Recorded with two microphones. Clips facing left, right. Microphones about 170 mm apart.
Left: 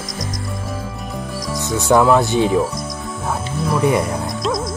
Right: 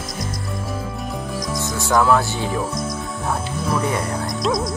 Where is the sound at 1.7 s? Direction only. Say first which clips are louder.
Left 4 dB; 20° left (ahead or behind).